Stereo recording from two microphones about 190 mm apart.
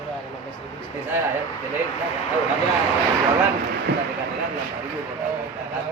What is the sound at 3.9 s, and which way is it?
Speech, 60° right (ahead or behind).